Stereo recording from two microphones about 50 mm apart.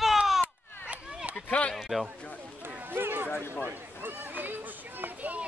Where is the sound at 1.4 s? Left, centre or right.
Left.